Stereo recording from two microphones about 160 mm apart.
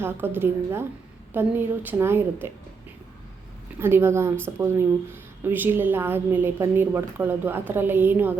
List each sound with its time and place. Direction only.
0.0 s a woman's voice: 15° right (ahead or behind)
3.8 s a woman's voice: 15° right (ahead or behind)